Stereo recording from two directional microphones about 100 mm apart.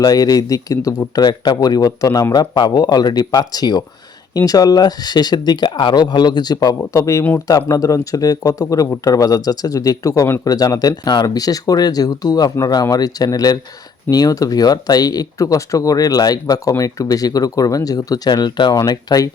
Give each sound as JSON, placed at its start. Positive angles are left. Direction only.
{"t": 0.0, "sound": "speech", "side_deg": 40}